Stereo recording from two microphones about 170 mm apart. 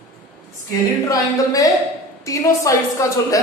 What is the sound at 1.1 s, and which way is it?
A woman's voice, 20° left (ahead or behind).